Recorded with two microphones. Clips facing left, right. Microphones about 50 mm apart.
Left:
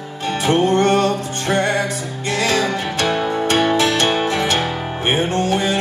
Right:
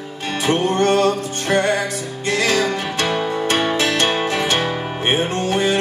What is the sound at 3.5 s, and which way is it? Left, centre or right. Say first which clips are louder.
Music: left 3 dB; right.